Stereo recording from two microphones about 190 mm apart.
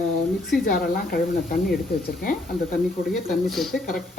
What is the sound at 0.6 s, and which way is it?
Speech, 50° left (ahead or behind).